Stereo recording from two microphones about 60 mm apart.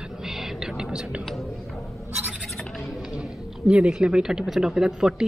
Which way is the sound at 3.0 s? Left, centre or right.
Centre.